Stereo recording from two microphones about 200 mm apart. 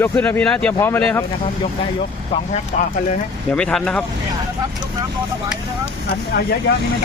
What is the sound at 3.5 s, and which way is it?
Speech, 5° left (ahead or behind).